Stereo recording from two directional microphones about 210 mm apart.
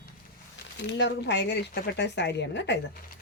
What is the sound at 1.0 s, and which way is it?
Speech, 55° left (ahead or behind).